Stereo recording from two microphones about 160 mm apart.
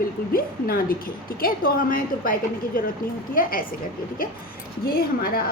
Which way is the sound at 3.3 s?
60° left (ahead or behind).